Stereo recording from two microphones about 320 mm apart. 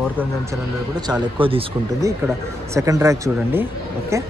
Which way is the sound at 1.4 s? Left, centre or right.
Centre.